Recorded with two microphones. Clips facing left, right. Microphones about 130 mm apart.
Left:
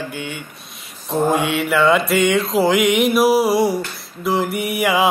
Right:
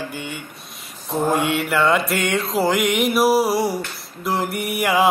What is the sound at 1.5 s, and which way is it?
Music, centre (ahead or behind).